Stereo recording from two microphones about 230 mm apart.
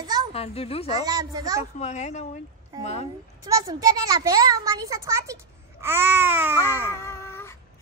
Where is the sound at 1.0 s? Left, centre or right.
Centre.